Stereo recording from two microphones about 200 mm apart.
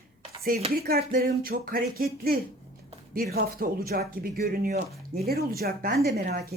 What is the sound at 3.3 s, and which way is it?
A woman's voice, 50° right (ahead or behind).